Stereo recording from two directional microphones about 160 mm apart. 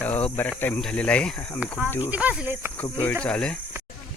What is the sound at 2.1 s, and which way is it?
Speech, 10° right (ahead or behind).